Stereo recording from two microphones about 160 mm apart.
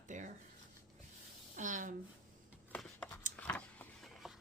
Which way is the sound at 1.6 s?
55° right (ahead or behind).